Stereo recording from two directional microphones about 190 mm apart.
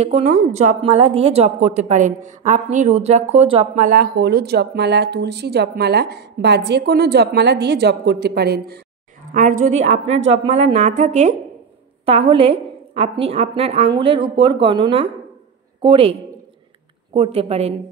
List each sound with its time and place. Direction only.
0.0 s a woman's voice: 35° right (ahead or behind); by 8.8 s 55° right (ahead or behind)
9.3 s a woman's voice: 45° right (ahead or behind)